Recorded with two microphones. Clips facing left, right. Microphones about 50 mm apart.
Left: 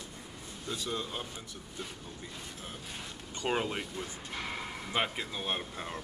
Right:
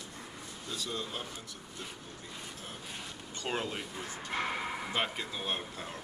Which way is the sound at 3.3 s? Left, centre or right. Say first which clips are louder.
Left 4 dB; centre.